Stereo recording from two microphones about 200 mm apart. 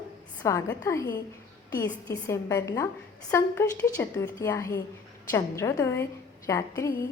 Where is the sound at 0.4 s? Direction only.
15° left (ahead or behind).